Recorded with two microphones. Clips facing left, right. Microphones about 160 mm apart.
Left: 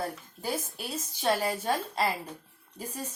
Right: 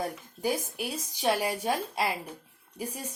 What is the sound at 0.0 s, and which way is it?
A woman's voice, 15° right (ahead or behind).